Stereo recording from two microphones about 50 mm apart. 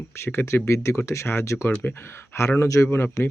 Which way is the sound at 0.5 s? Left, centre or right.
Left.